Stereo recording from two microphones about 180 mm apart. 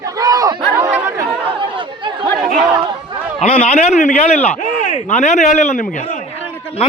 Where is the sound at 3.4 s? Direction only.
35° left (ahead or behind).